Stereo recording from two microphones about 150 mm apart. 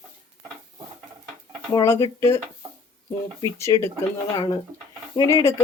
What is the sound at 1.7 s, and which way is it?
Speech, 20° left (ahead or behind).